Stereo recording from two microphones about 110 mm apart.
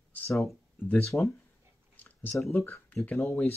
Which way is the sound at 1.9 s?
15° left (ahead or behind).